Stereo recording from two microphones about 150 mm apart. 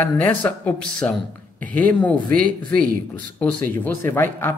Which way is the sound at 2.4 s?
5° left (ahead or behind).